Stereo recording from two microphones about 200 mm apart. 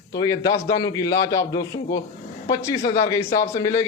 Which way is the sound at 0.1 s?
20° left (ahead or behind).